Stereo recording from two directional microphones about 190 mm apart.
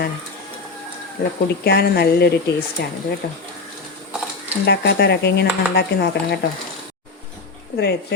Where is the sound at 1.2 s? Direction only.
55° left (ahead or behind).